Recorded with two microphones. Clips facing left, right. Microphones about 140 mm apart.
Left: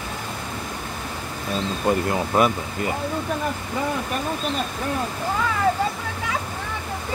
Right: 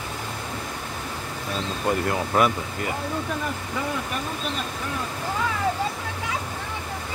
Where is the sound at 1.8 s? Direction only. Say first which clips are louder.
Left 2 dB; 20° left (ahead or behind).